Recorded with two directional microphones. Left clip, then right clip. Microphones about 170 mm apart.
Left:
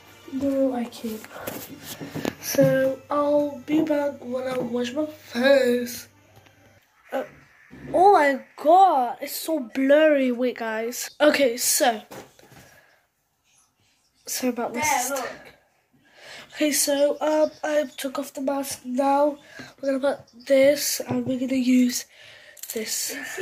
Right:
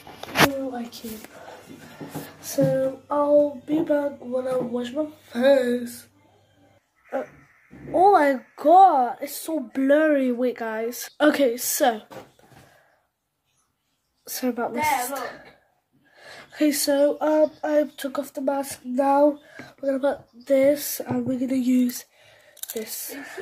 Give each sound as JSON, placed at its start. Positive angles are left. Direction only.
{"t": 2.7, "sound": "child singing", "side_deg": -10}
{"t": 7.9, "sound": "speech", "side_deg": -15}
{"t": 8.2, "sound": "a woman's voice", "side_deg": -30}
{"t": 9.3, "sound": "child singing", "side_deg": -10}
{"t": 14.2, "sound": "a woman's voice", "side_deg": -25}
{"t": 17.9, "sound": "speech", "side_deg": -30}
{"t": 19.5, "sound": "speech", "side_deg": -15}